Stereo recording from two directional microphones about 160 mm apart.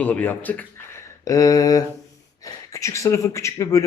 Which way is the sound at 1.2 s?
20° left (ahead or behind).